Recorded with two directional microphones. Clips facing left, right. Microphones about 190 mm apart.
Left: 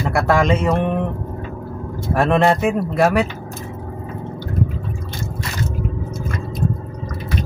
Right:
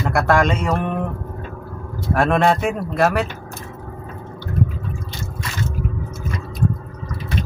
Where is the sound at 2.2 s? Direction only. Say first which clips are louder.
Left 1 dB; centre (ahead or behind).